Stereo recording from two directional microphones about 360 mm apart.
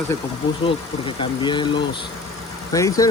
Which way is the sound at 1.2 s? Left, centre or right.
Centre.